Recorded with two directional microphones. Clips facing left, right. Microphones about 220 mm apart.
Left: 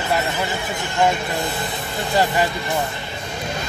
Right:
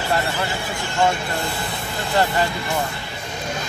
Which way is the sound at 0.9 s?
20° left (ahead or behind).